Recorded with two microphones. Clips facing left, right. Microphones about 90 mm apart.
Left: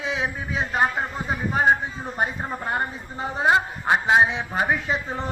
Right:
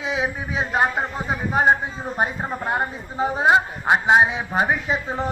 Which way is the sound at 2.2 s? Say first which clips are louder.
Right 2 dB; 10° right (ahead or behind).